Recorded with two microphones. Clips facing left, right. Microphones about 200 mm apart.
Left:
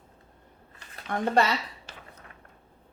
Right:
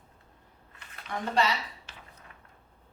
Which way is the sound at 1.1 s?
50° left (ahead or behind).